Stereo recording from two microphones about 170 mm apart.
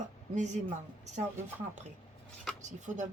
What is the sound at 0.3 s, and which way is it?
Speech, 45° right (ahead or behind).